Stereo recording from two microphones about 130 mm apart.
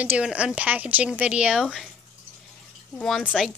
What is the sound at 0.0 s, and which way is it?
Speech, 10° right (ahead or behind).